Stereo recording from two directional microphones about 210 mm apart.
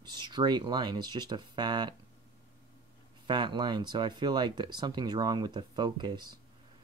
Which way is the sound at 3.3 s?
20° right (ahead or behind).